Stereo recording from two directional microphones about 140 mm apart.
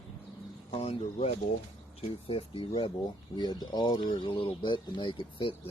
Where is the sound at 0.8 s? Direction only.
50° left (ahead or behind).